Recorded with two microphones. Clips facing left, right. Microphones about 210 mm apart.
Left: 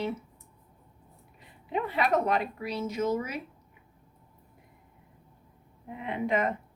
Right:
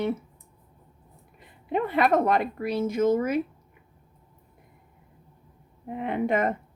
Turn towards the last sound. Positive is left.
turn(degrees=-50)  # may be behind; listen again after turning